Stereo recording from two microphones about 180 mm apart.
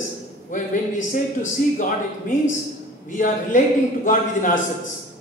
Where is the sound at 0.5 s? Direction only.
45° left (ahead or behind).